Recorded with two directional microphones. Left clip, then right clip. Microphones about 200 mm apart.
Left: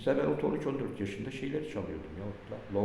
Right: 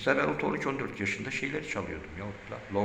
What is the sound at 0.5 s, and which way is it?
A man's voice, 10° left (ahead or behind).